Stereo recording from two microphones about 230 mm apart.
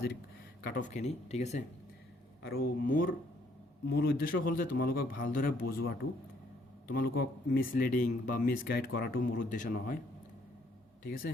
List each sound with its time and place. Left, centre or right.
0.6 s speech: left
2.4 s speech: left